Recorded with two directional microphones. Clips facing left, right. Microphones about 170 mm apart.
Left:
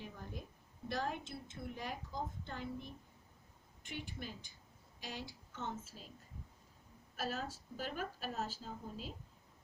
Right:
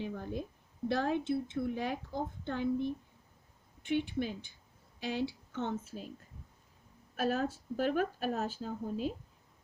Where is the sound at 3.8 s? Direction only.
60° right (ahead or behind).